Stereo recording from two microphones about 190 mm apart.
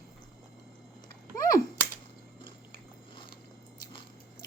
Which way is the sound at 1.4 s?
20° left (ahead or behind).